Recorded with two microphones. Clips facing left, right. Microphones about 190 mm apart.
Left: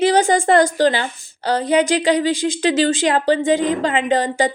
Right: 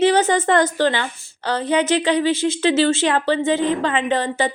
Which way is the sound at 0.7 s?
35° left (ahead or behind).